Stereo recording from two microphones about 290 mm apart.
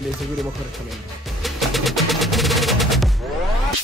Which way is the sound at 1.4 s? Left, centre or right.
Centre.